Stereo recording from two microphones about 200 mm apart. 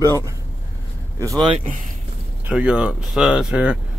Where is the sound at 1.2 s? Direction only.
20° right (ahead or behind).